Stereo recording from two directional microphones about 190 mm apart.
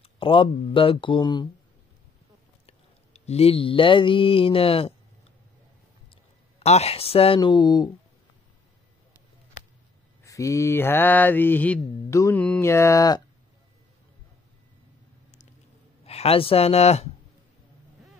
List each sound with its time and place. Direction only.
0.0 s speech: 25° left (ahead or behind)
2.6 s mantra: 35° left (ahead or behind)
6.6 s speech: 35° left (ahead or behind)
10.2 s mantra: 15° left (ahead or behind)
16.1 s speech: 30° left (ahead or behind)